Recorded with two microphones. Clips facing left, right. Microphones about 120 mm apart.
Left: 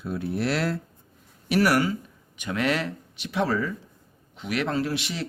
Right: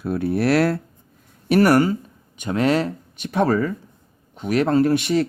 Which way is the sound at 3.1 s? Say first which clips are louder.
Right 6 dB; 50° right (ahead or behind).